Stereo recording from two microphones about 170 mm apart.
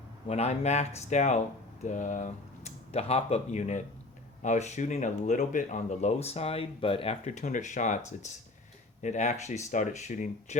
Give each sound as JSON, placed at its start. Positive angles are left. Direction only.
{"t": 0.3, "sound": "speech", "side_deg": 40}